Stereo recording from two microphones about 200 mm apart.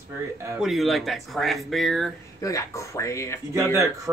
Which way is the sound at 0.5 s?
Centre (ahead or behind).